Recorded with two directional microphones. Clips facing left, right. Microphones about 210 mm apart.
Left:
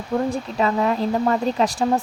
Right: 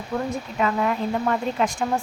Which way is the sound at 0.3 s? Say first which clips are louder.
Left 3 dB; 35° left (ahead or behind).